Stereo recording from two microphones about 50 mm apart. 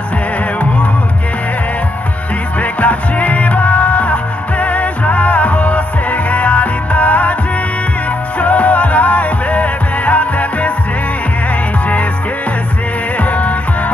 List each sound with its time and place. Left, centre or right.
0.6 s music: left
2.6 s music: left
8.4 s music: left
13.2 s music: left